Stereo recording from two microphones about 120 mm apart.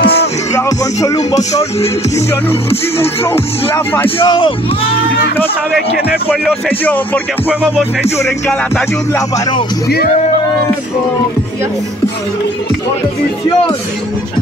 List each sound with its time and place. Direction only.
0.0 s music: 55° left (ahead or behind)
0.7 s music: 30° left (ahead or behind)
1.5 s music: 60° left (ahead or behind)
3.7 s speech: 20° left (ahead or behind)
4.2 s speech: 45° left (ahead or behind)
7.4 s music: 10° right (ahead or behind)